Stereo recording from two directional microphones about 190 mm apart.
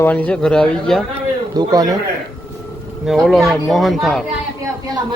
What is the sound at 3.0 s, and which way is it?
A man's voice, centre (ahead or behind).